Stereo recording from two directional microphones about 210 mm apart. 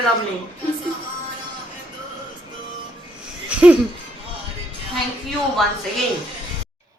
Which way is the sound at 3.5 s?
5° right (ahead or behind).